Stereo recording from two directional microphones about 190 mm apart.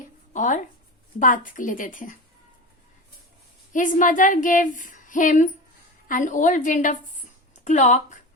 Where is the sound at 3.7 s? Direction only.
45° left (ahead or behind).